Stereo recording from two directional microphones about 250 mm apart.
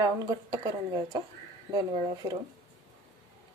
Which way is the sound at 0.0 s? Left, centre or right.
Centre.